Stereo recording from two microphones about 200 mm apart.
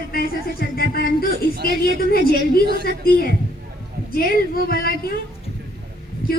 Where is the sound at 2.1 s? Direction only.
50° left (ahead or behind).